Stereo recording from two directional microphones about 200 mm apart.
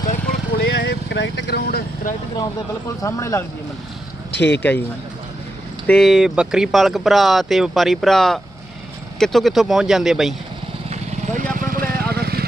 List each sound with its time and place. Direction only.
0.1 s vehicle: 50° left (ahead or behind)
3.0 s speech: 15° left (ahead or behind)
4.4 s speech: 60° left (ahead or behind)
5.9 s speech: centre (ahead or behind)
10.8 s vehicle: 35° right (ahead or behind)